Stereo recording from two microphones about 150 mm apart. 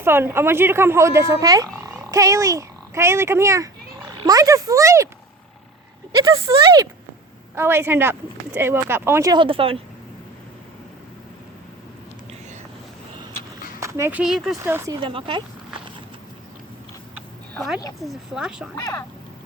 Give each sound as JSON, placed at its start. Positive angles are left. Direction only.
{"t": 0.0, "sound": "speech", "side_deg": -15}
{"t": 6.1, "sound": "speech", "side_deg": -30}
{"t": 7.5, "sound": "speech", "side_deg": -15}
{"t": 9.3, "sound": "speech", "side_deg": -35}
{"t": 13.7, "sound": "a sound", "side_deg": -20}
{"t": 14.2, "sound": "speech", "side_deg": 0}
{"t": 14.6, "sound": "speech", "side_deg": -15}
{"t": 15.0, "sound": "speech", "side_deg": -35}
{"t": 18.0, "sound": "speech", "side_deg": -5}
{"t": 18.8, "sound": "speech", "side_deg": 25}